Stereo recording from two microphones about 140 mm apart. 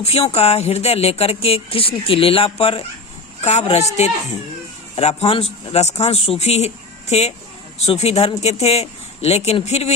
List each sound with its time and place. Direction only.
0.0 s speech: 45° left (ahead or behind)